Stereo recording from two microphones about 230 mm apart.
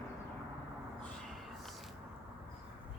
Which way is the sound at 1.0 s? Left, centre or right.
Centre.